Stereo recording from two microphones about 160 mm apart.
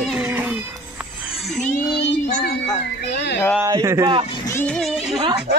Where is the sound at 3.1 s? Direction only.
90° left.